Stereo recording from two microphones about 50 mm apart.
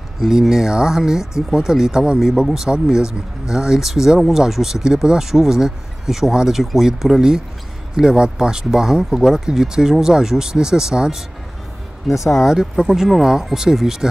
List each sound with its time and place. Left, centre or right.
0.3 s speech: centre
12.1 s speech: left
12.4 s speech: centre